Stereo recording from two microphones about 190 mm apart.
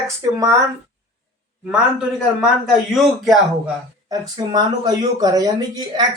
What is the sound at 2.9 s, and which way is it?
Speech, centre (ahead or behind).